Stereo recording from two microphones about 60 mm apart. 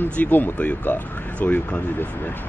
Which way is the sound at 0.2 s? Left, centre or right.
Left.